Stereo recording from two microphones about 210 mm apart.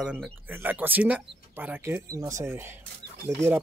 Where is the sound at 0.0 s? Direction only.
5° right (ahead or behind).